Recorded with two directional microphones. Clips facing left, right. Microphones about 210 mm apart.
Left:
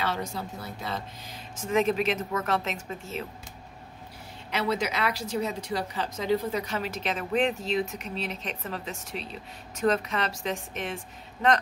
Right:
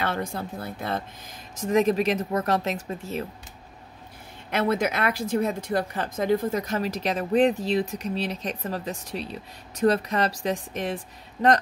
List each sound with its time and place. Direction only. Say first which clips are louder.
0.0 s speech: right 3 dB; 55° right (ahead or behind)
1.6 s speech: right 4 dB; 40° right (ahead or behind)
4.5 s speech: right 4 dB; 50° right (ahead or behind); by 11.0 s 35° right (ahead or behind)